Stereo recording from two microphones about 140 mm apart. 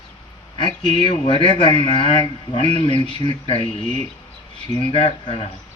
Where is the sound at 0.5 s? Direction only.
35° left (ahead or behind).